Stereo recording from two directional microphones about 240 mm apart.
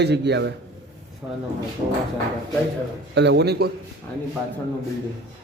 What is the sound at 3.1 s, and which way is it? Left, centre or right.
Speech, right.